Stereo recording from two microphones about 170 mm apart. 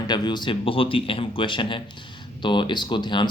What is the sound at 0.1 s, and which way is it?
Speech, 25° left (ahead or behind).